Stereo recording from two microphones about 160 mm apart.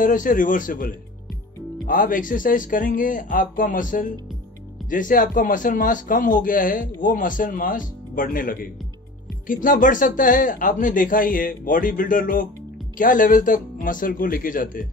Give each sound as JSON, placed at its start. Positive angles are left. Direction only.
{"t": 0.0, "sound": "speech", "side_deg": 55}